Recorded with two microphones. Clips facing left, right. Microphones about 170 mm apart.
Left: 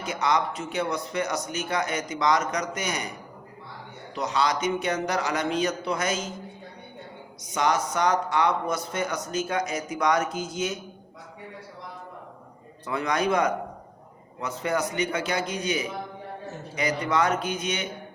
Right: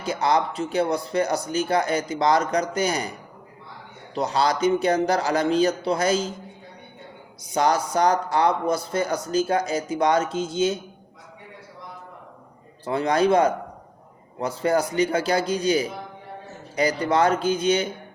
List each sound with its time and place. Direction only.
0.0 s speech: 30° right (ahead or behind)
4.1 s speech: 35° right (ahead or behind)
7.5 s speech: 35° right (ahead or behind)
12.8 s a man's voice: 30° right (ahead or behind)